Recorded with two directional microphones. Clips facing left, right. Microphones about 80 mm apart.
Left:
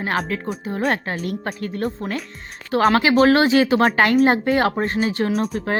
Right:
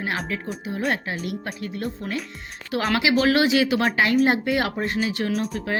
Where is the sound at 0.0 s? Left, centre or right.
Left.